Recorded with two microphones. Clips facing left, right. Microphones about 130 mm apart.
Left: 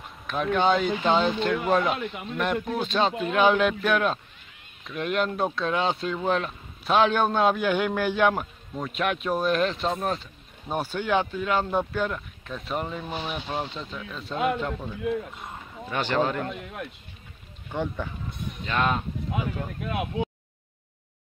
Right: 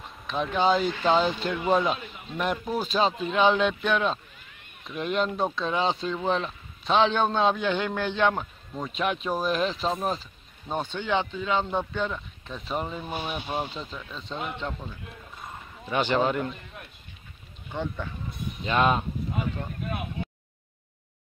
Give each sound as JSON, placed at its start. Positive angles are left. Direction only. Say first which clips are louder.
{"t": 0.0, "sound": "speech", "louder": "left 1 dB", "side_deg": 0}
{"t": 13.8, "sound": "speech", "louder": "left 2 dB", "side_deg": 0}
{"t": 15.9, "sound": "speech", "louder": "right 1 dB", "side_deg": -10}
{"t": 16.4, "sound": "speech", "louder": "left 3 dB", "side_deg": 80}
{"t": 17.7, "sound": "speech", "louder": "left 2 dB", "side_deg": 15}
{"t": 18.7, "sound": "speech", "louder": "right 3 dB", "side_deg": -15}
{"t": 19.3, "sound": "speech", "louder": "left 3 dB", "side_deg": 90}